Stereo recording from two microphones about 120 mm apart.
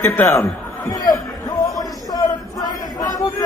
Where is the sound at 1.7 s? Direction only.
30° left (ahead or behind).